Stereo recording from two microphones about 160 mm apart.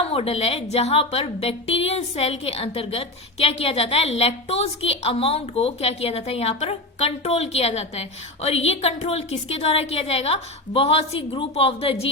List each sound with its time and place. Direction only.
0.0 s a woman's voice: 40° left (ahead or behind)